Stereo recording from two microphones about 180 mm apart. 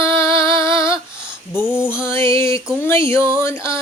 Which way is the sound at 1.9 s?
15° left (ahead or behind).